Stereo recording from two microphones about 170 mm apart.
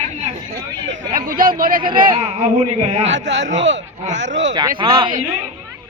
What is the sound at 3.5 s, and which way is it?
Speech, 90° right.